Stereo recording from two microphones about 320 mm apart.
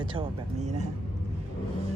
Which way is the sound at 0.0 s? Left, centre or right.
Centre.